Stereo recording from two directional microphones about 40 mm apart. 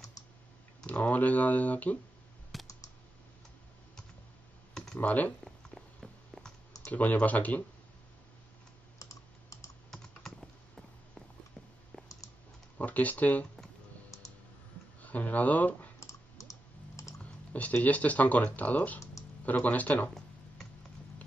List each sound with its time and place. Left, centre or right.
0.8 s speech: left
2.5 s computer keyboard: centre
5.0 s speech: left
6.3 s a sound: left
6.9 s speech: left
9.8 s computer keyboard: centre
11.9 s clicking: centre
12.7 s speech: left
15.0 s speech: left
17.2 s typing: left
17.8 s speech: left